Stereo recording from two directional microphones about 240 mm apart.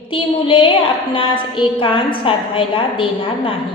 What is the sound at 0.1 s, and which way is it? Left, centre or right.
A woman's voice, left.